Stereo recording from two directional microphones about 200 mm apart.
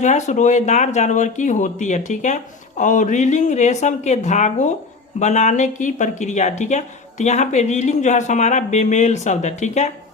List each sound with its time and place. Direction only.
0.0 s speech: 35° left (ahead or behind)